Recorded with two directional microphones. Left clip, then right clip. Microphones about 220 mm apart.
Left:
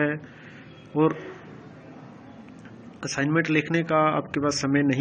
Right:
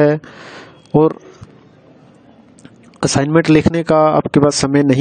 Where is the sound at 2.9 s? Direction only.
60° right (ahead or behind).